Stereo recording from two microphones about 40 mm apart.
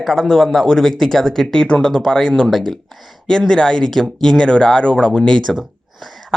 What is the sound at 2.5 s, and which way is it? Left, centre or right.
Speech, centre.